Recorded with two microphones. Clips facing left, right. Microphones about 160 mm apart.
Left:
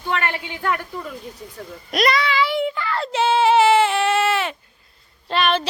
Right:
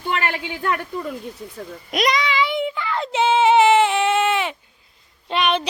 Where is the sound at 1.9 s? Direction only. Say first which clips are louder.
Left 1 dB; 15° right (ahead or behind).